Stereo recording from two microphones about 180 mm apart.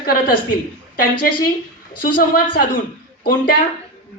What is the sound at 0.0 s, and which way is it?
Speech, 55° left (ahead or behind).